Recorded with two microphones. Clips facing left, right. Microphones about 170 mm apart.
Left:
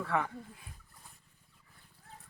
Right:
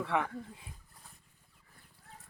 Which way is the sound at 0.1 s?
10° right (ahead or behind).